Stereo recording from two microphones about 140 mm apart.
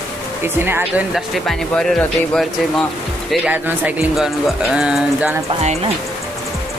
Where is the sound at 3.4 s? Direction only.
10° right (ahead or behind).